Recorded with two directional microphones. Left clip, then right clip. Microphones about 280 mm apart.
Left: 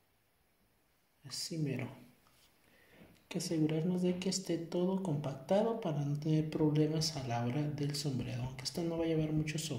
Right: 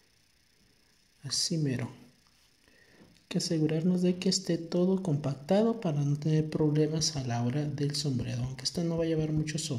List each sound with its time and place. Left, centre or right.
1.2 s a woman's voice: right
3.3 s a woman's voice: right